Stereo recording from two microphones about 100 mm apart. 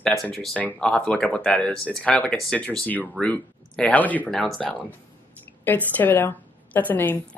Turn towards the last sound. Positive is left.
turn(degrees=15)  # may be behind; listen again after turning